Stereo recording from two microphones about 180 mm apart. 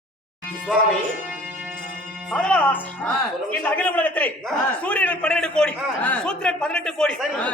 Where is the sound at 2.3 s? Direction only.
5° left (ahead or behind).